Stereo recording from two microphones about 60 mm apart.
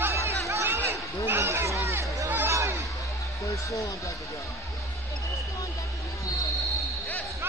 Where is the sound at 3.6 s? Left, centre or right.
Left.